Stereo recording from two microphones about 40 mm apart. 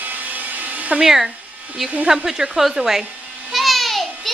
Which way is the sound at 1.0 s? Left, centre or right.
Centre.